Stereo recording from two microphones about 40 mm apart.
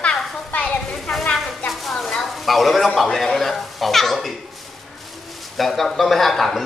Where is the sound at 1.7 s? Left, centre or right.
Centre.